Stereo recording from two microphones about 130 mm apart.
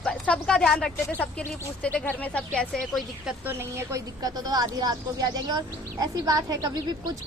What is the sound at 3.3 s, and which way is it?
A woman's voice, 15° right (ahead or behind).